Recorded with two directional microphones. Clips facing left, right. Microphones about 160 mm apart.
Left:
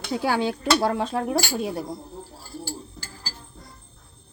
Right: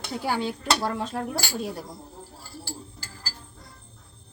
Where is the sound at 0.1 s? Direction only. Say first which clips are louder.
Left 4 dB; 90° left; by 1.8 s 60° left (ahead or behind).